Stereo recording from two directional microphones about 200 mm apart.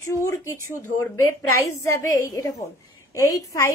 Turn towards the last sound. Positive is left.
turn(degrees=15)  # may be behind; listen again after turning